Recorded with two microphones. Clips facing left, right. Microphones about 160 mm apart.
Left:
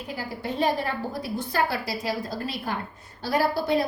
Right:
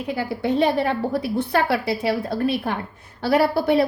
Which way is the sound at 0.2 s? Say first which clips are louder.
Right 7 dB; 70° right (ahead or behind).